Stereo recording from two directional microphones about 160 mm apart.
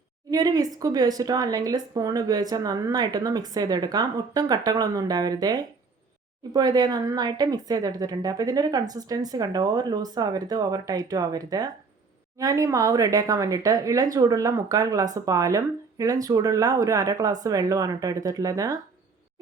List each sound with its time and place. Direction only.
0.3 s speech: 25° right (ahead or behind)